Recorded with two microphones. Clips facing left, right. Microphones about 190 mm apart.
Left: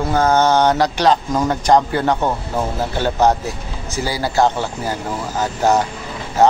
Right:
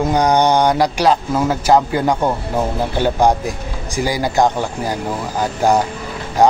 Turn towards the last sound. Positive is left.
turn(degrees=-15)  # may be behind; listen again after turning